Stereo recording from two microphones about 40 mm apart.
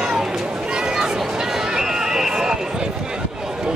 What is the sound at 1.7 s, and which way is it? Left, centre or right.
Run, centre.